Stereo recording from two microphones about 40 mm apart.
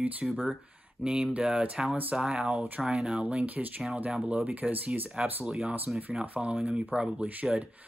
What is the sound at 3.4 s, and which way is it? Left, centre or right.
Speech, right.